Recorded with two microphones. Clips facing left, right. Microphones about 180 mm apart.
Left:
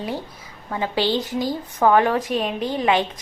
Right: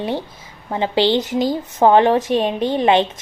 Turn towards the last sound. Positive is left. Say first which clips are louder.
# right 5 dB
turn(degrees=-25)  # may be behind; listen again after turning